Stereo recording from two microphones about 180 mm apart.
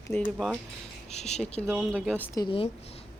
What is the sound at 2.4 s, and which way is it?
Speech, 30° left (ahead or behind).